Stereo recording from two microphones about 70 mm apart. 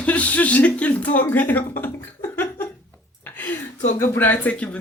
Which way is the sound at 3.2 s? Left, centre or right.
Left.